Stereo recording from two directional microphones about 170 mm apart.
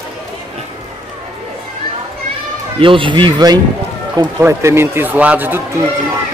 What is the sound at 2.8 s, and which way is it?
Speech, 30° right (ahead or behind).